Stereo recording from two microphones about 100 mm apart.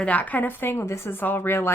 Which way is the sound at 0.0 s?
15° left (ahead or behind).